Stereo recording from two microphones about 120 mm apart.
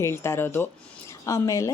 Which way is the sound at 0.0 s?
20° left (ahead or behind).